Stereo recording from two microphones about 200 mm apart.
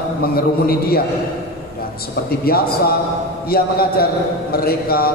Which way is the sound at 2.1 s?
50° left (ahead or behind).